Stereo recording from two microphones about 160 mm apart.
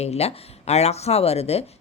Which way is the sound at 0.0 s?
40° left (ahead or behind).